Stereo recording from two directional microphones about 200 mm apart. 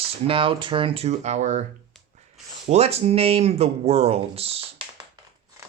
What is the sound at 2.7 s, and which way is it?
A man's voice, 30° right (ahead or behind).